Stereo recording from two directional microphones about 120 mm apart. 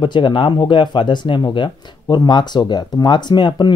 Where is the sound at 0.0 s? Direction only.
40° left (ahead or behind).